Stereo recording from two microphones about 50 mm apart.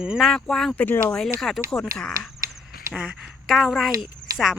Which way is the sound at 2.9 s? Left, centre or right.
Centre.